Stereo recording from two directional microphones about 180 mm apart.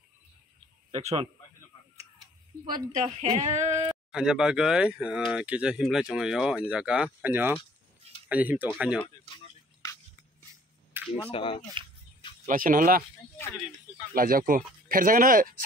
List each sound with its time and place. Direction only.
0.9 s speech: 30° right (ahead or behind)
2.9 s speech: 40° right (ahead or behind)
4.1 s speech: 5° right (ahead or behind)
10.9 s a sound: 10° right (ahead or behind)
11.3 s speech: 30° left (ahead or behind)
12.4 s speech: 50° right (ahead or behind)
14.1 s speech: 50° right (ahead or behind)